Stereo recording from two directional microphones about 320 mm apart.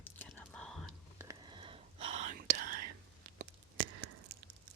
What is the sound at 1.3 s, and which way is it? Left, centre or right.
Whispering, centre.